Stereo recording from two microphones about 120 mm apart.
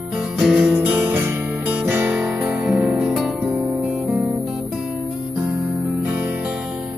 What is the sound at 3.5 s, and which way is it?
Music, 15° right (ahead or behind).